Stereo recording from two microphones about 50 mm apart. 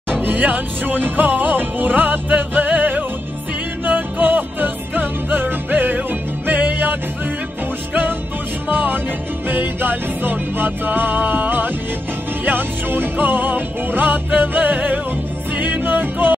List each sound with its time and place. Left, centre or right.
0.1 s music: right
8.6 s music: right